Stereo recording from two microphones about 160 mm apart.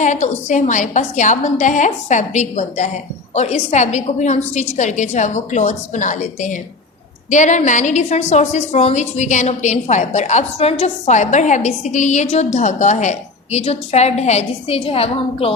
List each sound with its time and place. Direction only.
0.0 s a woman's voice: 50° left (ahead or behind)